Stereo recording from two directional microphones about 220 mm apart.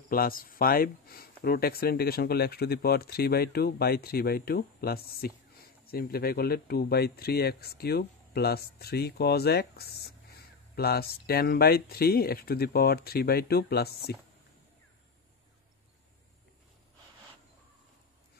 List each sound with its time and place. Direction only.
0.1 s speech: 40° left (ahead or behind)